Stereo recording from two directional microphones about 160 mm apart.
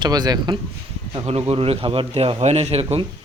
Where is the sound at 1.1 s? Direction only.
40° right (ahead or behind).